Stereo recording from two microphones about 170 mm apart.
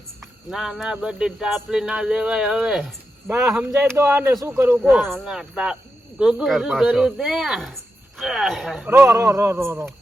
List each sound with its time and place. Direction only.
0.5 s speech: centre (ahead or behind)
3.2 s a man's voice: 15° right (ahead or behind)
4.8 s speech: centre (ahead or behind)
9.1 s a man's voice: 15° right (ahead or behind)